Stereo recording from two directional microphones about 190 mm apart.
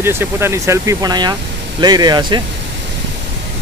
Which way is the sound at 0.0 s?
10° right (ahead or behind).